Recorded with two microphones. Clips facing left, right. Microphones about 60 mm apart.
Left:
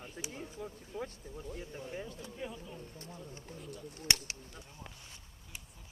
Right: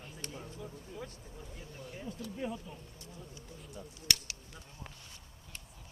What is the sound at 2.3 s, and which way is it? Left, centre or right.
Speech, centre.